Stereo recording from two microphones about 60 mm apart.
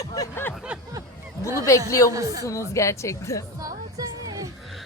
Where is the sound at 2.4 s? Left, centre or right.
Left.